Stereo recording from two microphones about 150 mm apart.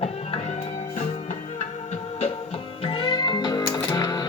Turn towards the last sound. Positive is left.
turn(degrees=25)  # may be behind; listen again after turning